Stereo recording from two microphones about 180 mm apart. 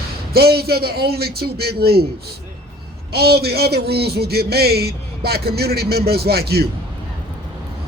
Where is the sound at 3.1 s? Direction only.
60° right (ahead or behind).